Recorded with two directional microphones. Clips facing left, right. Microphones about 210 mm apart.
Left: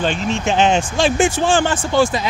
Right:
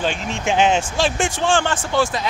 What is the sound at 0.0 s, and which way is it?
Speech, 10° right (ahead or behind).